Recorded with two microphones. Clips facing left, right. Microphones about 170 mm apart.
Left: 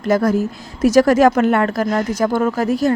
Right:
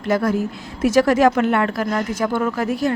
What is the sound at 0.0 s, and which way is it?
A woman's voice, 40° left (ahead or behind).